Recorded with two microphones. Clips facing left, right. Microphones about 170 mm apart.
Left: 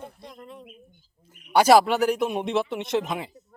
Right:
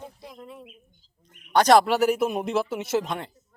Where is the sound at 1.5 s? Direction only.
5° left (ahead or behind).